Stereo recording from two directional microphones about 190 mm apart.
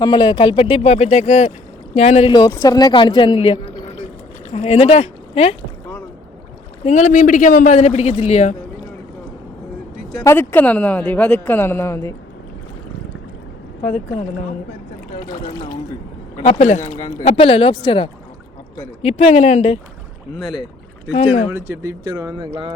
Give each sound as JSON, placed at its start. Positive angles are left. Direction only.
{"t": 0.0, "sound": "a man's voice", "side_deg": 25}
{"t": 6.8, "sound": "a man's voice", "side_deg": 40}
{"t": 10.2, "sound": "a woman's voice", "side_deg": 10}
{"t": 15.3, "sound": "a man's voice", "side_deg": 20}
{"t": 16.5, "sound": "a man's voice", "side_deg": 35}
{"t": 21.5, "sound": "speech", "side_deg": -15}